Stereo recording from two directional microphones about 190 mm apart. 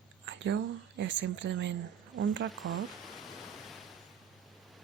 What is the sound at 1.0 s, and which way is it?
Speech, 70° right (ahead or behind).